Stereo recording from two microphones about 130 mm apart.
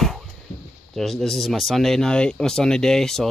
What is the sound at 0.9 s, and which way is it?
Speech, centre (ahead or behind).